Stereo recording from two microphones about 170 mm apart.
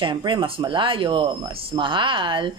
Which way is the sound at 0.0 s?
30° right (ahead or behind).